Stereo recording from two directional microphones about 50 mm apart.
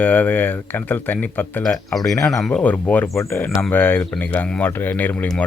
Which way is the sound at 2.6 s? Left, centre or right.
Left.